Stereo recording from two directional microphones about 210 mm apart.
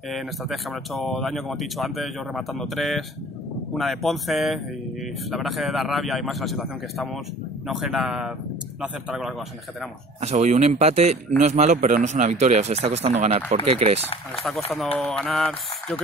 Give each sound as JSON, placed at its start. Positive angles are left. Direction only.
{"t": 0.1, "sound": "speech", "side_deg": 0}
{"t": 10.2, "sound": "speech", "side_deg": -35}
{"t": 15.0, "sound": "speech", "side_deg": 5}